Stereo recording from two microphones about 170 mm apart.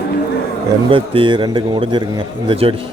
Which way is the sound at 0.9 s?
30° right (ahead or behind).